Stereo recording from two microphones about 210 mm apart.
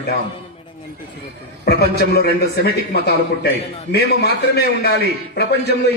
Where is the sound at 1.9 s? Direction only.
50° left (ahead or behind).